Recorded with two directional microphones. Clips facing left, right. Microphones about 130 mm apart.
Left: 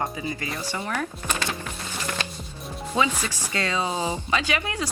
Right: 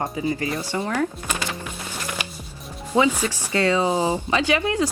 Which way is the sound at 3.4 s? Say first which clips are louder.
Right 7 dB; 20° right (ahead or behind).